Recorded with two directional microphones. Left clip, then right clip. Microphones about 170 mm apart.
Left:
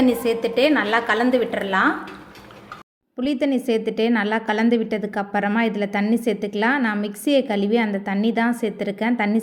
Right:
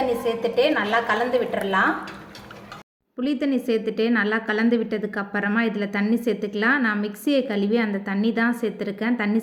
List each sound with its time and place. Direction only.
0.3 s a woman's voice: 50° left (ahead or behind)
3.2 s a woman's voice: 20° left (ahead or behind)